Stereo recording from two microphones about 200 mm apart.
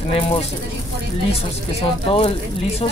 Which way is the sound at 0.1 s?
30° left (ahead or behind).